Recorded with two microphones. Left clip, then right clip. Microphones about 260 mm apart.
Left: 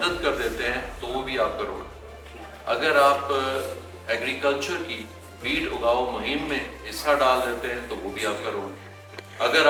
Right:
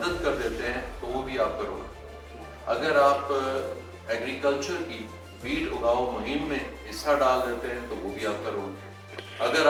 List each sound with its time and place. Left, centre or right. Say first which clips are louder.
0.0 s a man's voice: left 3 dB; centre
5.8 s a man's voice: left 2 dB; right
6.2 s a man's voice: left 3 dB; centre